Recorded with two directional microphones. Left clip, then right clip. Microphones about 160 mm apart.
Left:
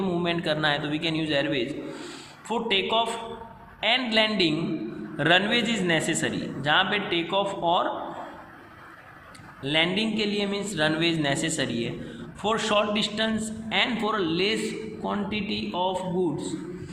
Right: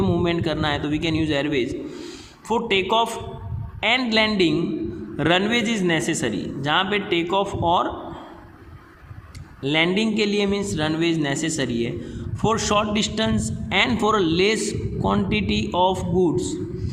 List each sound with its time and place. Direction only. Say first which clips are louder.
0.0 s a man's voice: right 4 dB; 40° right (ahead or behind)
9.6 s a man's voice: right 4 dB; 40° right (ahead or behind)